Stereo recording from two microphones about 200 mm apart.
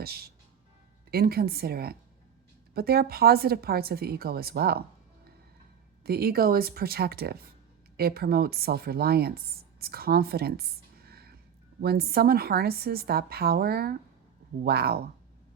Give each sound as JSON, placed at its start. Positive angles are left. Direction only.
{"t": 0.0, "sound": "a woman's voice", "side_deg": -50}
{"t": 6.0, "sound": "a woman's voice", "side_deg": -50}
{"t": 11.1, "sound": "a sound", "side_deg": -50}
{"t": 11.8, "sound": "a woman's voice", "side_deg": -50}